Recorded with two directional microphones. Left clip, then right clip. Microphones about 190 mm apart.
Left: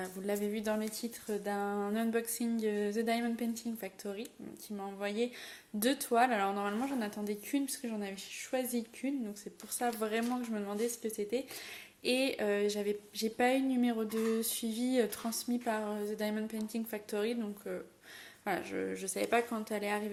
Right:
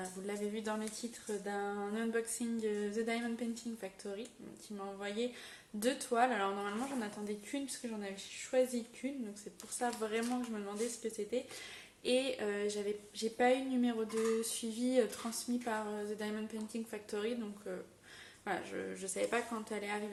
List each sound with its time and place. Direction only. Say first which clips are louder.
0.0 s speech: left 5 dB; 45° left (ahead or behind)